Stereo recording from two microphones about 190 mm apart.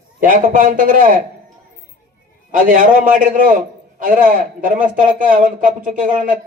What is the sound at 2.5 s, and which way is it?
A man's voice, 45° right (ahead or behind).